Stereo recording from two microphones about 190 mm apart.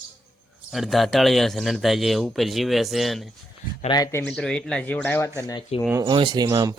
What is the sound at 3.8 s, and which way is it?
Speech, 20° left (ahead or behind).